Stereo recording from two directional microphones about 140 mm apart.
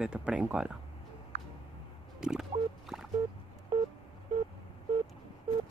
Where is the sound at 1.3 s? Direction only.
55° right (ahead or behind).